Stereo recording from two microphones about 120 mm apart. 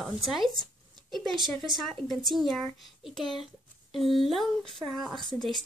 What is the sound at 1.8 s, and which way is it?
Speech, 5° left (ahead or behind).